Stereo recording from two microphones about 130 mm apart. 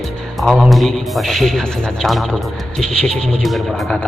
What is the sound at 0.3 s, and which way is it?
Speech, centre (ahead or behind).